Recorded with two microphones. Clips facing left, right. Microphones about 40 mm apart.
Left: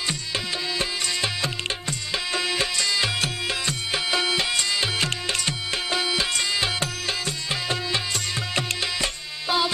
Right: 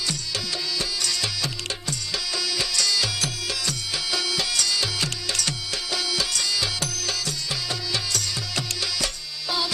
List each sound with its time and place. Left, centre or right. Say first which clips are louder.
0.7 s music: left 2 dB; left